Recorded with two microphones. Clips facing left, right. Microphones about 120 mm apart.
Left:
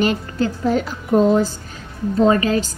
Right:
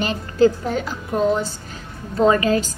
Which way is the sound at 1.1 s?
30° left (ahead or behind).